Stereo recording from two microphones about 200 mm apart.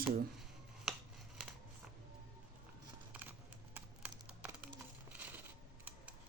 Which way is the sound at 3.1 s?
10° right (ahead or behind).